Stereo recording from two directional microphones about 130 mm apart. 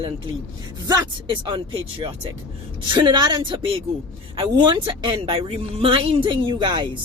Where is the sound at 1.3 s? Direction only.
40° right (ahead or behind).